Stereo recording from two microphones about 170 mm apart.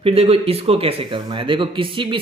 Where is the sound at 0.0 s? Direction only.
35° right (ahead or behind).